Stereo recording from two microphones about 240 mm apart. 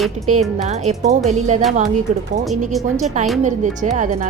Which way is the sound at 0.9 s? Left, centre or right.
Right.